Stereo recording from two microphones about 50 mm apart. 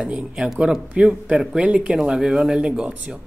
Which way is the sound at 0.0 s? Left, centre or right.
Centre.